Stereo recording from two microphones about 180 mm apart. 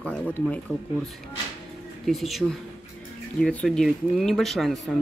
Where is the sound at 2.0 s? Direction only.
Centre (ahead or behind).